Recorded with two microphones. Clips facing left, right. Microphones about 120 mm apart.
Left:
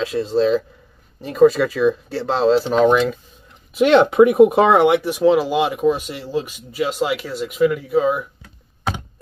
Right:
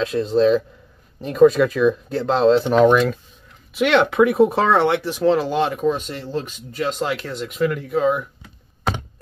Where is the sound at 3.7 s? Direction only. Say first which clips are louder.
Left 4 dB; 35° left (ahead or behind).